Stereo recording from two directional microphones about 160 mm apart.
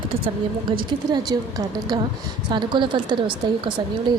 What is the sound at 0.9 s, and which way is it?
Speech, 25° right (ahead or behind).